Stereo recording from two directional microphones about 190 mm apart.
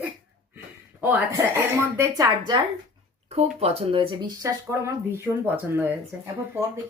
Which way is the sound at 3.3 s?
35° right (ahead or behind).